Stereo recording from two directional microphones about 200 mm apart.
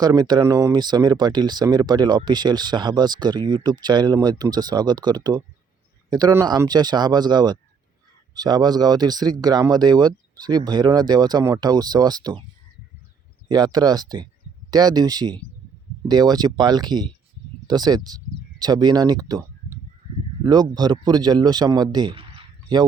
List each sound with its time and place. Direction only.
0.0 s speech: 20° right (ahead or behind)
13.7 s speech: 20° right (ahead or behind)